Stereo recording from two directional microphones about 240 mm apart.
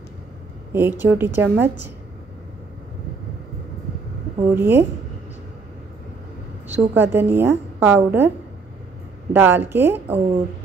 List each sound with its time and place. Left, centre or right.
0.7 s a woman's voice: centre
4.6 s a woman's voice: centre
6.7 s a woman's voice: centre
9.3 s a woman's voice: centre